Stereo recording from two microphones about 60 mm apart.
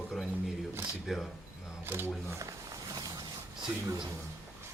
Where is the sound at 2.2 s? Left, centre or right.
Right.